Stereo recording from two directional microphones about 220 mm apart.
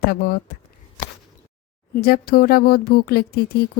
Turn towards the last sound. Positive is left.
turn(degrees=45)  # may be behind; listen again after turning